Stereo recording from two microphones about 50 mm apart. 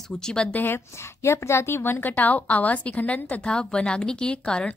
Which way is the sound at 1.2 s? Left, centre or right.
Left.